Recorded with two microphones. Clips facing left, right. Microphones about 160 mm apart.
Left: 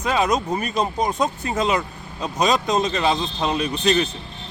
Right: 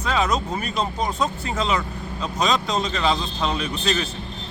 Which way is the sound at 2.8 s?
20° left (ahead or behind).